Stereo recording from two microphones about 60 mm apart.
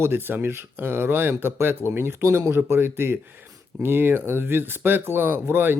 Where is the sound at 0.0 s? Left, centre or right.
Right.